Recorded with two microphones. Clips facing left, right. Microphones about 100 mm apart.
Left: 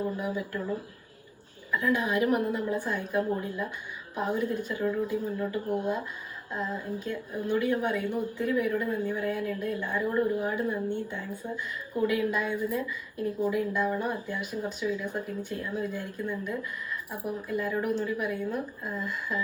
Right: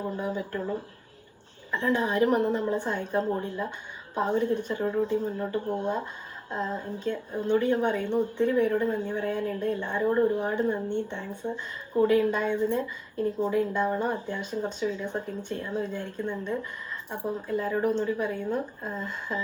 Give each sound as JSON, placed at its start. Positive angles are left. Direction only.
{"t": 0.0, "sound": "a woman's voice", "side_deg": -25}